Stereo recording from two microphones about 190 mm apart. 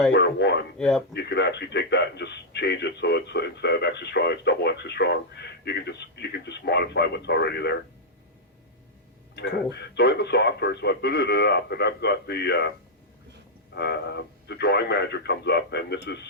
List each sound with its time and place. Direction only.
0.1 s a man's voice: 60° left (ahead or behind)
0.8 s speech: 5° left (ahead or behind)
1.1 s a man's voice: 60° left (ahead or behind)
9.3 s a man's voice: 65° left (ahead or behind)
13.7 s a man's voice: 60° left (ahead or behind)